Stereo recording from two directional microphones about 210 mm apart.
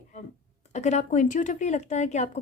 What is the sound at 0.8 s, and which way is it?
A woman's voice, 35° left (ahead or behind).